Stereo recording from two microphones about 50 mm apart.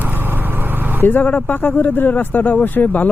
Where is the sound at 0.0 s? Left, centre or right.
Right.